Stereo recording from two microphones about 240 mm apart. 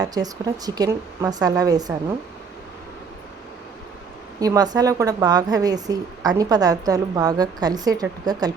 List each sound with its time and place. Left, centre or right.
0.0 s a woman's voice: centre
4.4 s a woman's voice: centre